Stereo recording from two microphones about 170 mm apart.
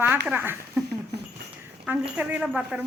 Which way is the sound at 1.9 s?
10° right (ahead or behind).